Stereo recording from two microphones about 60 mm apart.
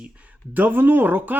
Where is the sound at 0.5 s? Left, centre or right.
Right.